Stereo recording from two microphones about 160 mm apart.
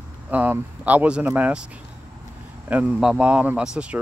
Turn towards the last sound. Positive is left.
turn(degrees=-5)  # may be behind; listen again after turning